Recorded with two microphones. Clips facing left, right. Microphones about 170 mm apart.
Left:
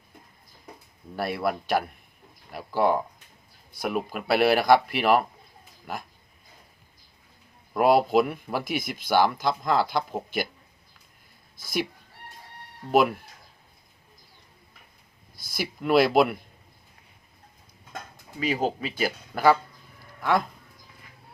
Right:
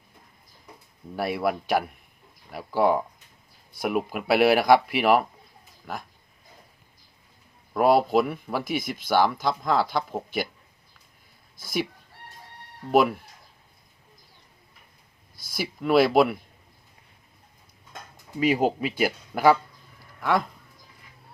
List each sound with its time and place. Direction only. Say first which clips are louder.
1.1 s speech: right 1 dB; 10° right (ahead or behind)
5.8 s speech: even; 5° left (ahead or behind)
7.7 s speech: even; centre (ahead or behind)
12.9 s speech: right 1 dB; centre (ahead or behind)
15.5 s speech: right 1 dB; centre (ahead or behind)
18.3 s speech: right 4 dB; 15° right (ahead or behind)